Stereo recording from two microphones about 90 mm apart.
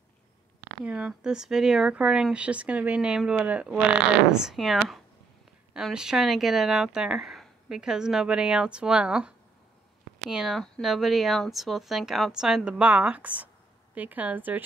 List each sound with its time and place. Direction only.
0.8 s speech: 10° right (ahead or behind)
4.3 s speech: 5° right (ahead or behind)
10.3 s speech: centre (ahead or behind); by 14.6 s 20° right (ahead or behind)